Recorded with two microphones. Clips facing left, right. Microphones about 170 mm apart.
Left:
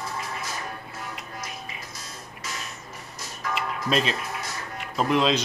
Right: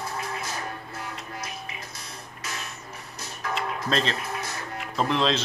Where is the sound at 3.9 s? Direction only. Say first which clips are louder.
Left 2 dB; 10° left (ahead or behind).